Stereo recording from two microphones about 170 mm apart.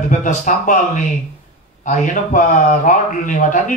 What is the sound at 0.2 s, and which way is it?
Speech, 50° left (ahead or behind).